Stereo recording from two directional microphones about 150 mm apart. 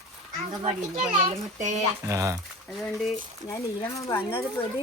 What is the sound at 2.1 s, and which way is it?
Speech, 20° right (ahead or behind).